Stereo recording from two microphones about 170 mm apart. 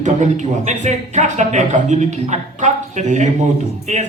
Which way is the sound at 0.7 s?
45° right (ahead or behind).